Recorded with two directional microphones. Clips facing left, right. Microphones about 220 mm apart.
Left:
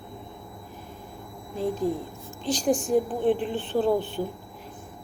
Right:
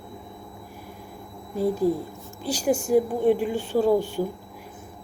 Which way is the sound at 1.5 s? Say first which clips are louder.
Right 4 dB; 10° right (ahead or behind).